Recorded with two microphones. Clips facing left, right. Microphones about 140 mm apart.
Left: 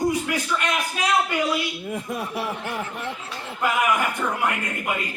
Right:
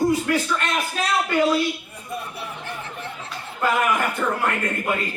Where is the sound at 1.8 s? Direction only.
90° left.